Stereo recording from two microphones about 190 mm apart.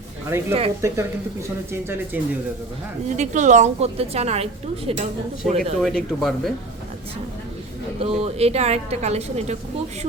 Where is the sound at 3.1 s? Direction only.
40° right (ahead or behind).